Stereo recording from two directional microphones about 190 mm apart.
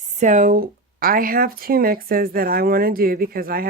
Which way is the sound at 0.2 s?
40° right (ahead or behind).